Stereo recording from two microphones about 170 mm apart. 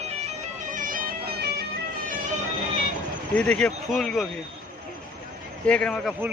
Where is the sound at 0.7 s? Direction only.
50° right (ahead or behind).